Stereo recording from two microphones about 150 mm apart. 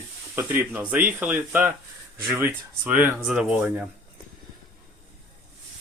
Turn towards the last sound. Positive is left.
turn(degrees=-10)  # may be behind; listen again after turning